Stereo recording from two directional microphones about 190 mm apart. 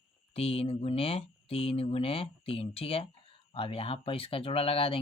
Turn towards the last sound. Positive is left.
turn(degrees=30)  # may be behind; listen again after turning